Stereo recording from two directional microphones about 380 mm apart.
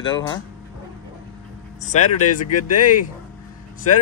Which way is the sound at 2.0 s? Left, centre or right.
Left.